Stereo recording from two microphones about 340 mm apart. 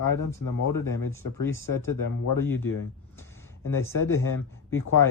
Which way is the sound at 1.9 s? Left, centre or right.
Left.